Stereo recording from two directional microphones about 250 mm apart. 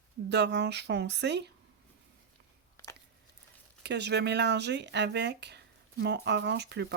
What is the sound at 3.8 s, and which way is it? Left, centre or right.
Speech, right.